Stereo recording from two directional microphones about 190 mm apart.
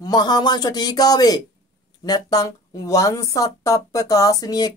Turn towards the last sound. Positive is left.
turn(degrees=20)  # may be behind; listen again after turning